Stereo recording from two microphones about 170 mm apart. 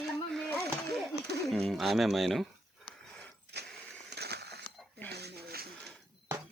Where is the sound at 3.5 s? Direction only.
85° right.